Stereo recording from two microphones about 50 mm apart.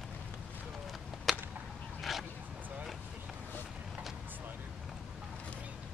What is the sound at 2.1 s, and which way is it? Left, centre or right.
Dog, centre.